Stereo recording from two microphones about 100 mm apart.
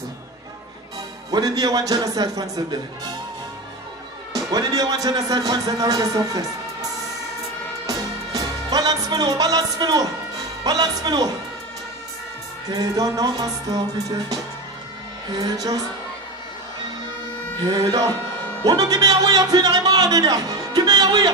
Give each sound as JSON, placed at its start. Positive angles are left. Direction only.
{"t": 1.3, "sound": "speech", "side_deg": -40}
{"t": 4.3, "sound": "speech", "side_deg": -40}
{"t": 7.8, "sound": "music", "side_deg": -40}
{"t": 12.6, "sound": "speech", "side_deg": -40}
{"t": 17.6, "sound": "a man's voice", "side_deg": -40}